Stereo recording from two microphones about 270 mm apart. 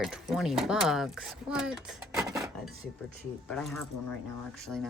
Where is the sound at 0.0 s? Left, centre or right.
Centre.